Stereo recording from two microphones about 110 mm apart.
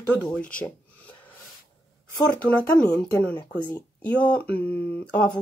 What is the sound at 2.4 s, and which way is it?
Speech, 10° left (ahead or behind).